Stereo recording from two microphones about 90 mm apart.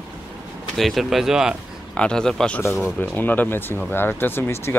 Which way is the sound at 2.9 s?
20° left (ahead or behind).